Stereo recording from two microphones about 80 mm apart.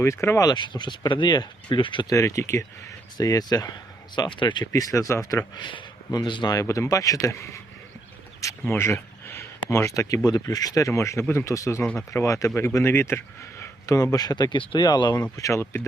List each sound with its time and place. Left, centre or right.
0.0 s speech: left
0.5 s speech: left
2.0 s speech: left
3.2 s speech: left
4.1 s speech: left
4.6 s speech: left
5.5 s speech: left
6.1 s speech: left
6.5 s speech: left
8.4 s a sound: left
8.8 s speech: left
10.2 s speech: left
13.8 s speech: left
15.1 s speech: left